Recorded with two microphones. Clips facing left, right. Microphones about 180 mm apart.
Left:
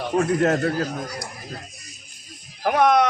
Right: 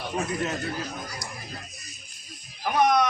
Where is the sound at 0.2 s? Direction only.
50° left (ahead or behind).